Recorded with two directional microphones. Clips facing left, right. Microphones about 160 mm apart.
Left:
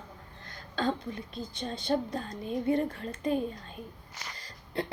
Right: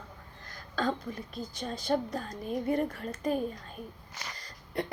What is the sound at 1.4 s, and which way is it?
A woman's voice, 25° left (ahead or behind).